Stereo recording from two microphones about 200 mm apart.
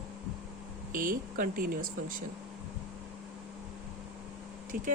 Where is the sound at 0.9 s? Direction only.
45° right (ahead or behind).